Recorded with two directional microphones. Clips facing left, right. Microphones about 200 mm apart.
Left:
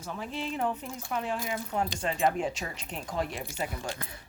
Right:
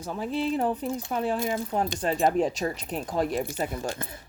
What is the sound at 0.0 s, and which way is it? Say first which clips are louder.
Speech: right 7 dB; 35° right (ahead or behind).